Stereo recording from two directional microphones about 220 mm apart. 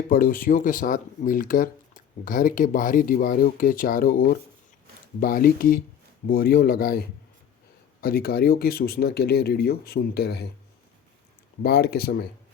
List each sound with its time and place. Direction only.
0.1 s speech: 40° left (ahead or behind)
8.0 s speech: 40° left (ahead or behind)
11.6 s speech: 45° left (ahead or behind)